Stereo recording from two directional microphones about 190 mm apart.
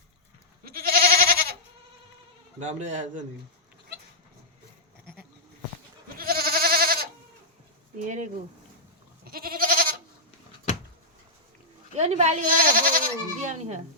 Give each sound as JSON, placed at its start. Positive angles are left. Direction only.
{"t": 0.6, "sound": "goat", "side_deg": -55}
{"t": 2.6, "sound": "speech", "side_deg": -35}
{"t": 6.1, "sound": "goat", "side_deg": -50}
{"t": 8.0, "sound": "speech", "side_deg": -40}
{"t": 9.2, "sound": "goat", "side_deg": -50}
{"t": 11.9, "sound": "speech", "side_deg": -35}